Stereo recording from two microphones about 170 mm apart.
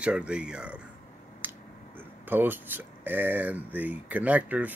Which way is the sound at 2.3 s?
10° right (ahead or behind).